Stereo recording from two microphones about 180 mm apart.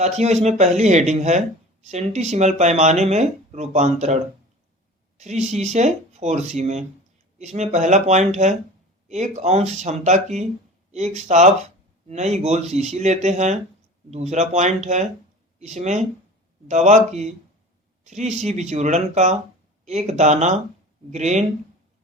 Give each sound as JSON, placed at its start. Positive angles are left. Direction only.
{"t": 0.0, "sound": "speech", "side_deg": -40}